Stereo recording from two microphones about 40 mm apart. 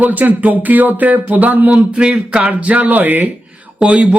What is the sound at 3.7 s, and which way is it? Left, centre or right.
Speech, right.